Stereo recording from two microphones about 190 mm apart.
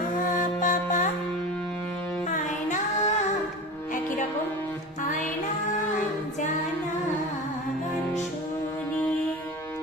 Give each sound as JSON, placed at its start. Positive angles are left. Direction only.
{"t": 0.3, "sound": "music", "side_deg": 45}
{"t": 2.3, "sound": "child singing", "side_deg": 40}